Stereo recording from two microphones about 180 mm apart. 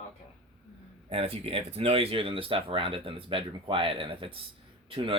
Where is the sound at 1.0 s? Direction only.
30° right (ahead or behind).